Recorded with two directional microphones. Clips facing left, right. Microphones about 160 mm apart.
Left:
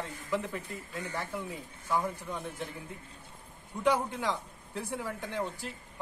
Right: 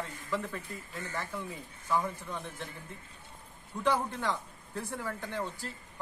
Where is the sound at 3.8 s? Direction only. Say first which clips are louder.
Left 2 dB; 10° left (ahead or behind).